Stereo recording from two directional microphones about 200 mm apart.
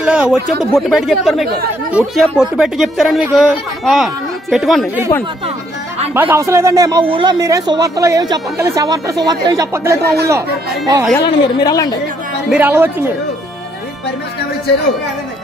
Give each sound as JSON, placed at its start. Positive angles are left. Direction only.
{"t": 0.0, "sound": "speech", "side_deg": -5}
{"t": 6.1, "sound": "speech", "side_deg": -10}
{"t": 10.0, "sound": "speech", "side_deg": -55}
{"t": 11.2, "sound": "speech", "side_deg": 20}
{"t": 12.4, "sound": "speech", "side_deg": -10}